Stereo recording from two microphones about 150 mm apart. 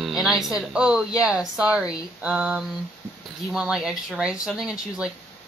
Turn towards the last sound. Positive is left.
turn(degrees=-5)  # may be behind; listen again after turning